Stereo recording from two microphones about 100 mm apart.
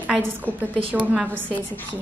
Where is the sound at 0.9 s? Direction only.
15° right (ahead or behind).